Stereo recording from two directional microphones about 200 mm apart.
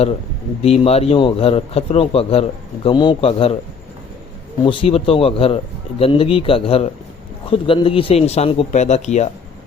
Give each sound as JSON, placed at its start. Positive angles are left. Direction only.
{"t": 0.6, "sound": "a man's voice", "side_deg": 30}
{"t": 4.6, "sound": "a man's voice", "side_deg": 25}